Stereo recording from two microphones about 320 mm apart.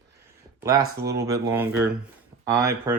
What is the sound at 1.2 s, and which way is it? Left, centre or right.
Speech, centre.